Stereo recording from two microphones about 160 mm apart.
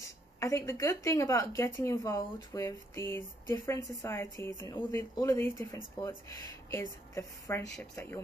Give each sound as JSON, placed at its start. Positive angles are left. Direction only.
{"t": 0.4, "sound": "speech", "side_deg": 20}